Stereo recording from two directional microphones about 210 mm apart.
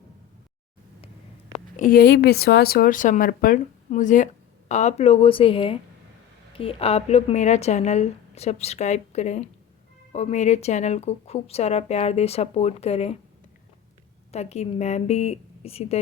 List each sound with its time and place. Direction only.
1.5 s a woman's voice: 35° left (ahead or behind)
14.3 s speech: 30° left (ahead or behind)